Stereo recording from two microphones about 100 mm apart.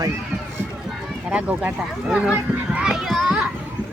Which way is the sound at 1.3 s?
15° right (ahead or behind).